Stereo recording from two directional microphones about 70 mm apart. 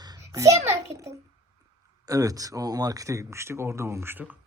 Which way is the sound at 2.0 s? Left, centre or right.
Right.